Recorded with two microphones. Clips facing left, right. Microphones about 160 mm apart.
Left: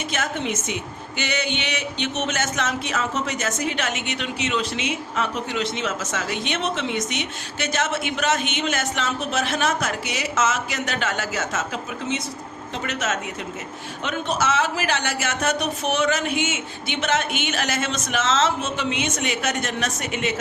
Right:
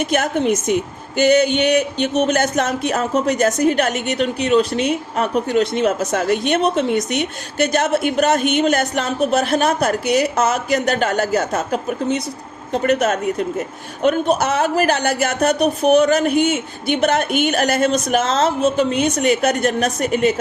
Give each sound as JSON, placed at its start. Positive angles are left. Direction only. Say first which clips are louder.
{"t": 0.0, "sound": "a woman's voice", "louder": "right 9 dB", "side_deg": -50}
{"t": 10.1, "sound": "a woman's voice", "louder": "right 12 dB", "side_deg": -50}
{"t": 10.3, "sound": "a woman's voice", "louder": "right 6 dB", "side_deg": -35}
{"t": 15.4, "sound": "a woman's voice", "louder": "right 8 dB", "side_deg": -35}